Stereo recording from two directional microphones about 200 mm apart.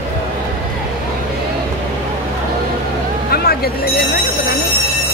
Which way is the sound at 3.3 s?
50° left (ahead or behind).